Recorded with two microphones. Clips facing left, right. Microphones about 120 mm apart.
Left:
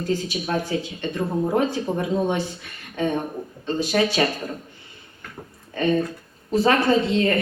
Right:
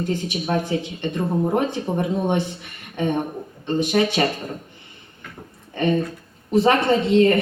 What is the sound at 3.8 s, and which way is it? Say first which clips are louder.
Speech: right 2 dB; 20° right (ahead or behind).